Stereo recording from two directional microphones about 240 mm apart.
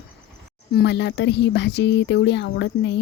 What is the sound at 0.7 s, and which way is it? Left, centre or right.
Speech, left.